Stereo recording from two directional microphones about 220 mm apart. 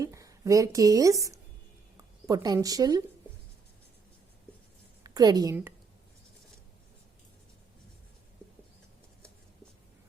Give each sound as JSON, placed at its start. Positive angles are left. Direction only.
{"t": 0.0, "sound": "a woman's voice", "side_deg": -15}
{"t": 5.0, "sound": "a woman's voice", "side_deg": -15}